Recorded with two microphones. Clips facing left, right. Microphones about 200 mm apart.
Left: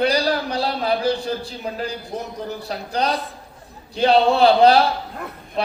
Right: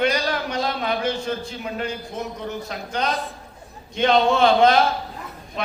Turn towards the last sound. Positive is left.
turn(degrees=35)  # may be behind; listen again after turning